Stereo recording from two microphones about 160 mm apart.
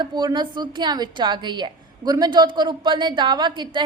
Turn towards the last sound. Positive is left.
turn(degrees=-30)  # may be behind; listen again after turning